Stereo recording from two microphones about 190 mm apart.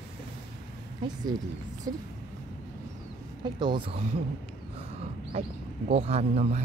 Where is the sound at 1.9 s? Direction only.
20° right (ahead or behind).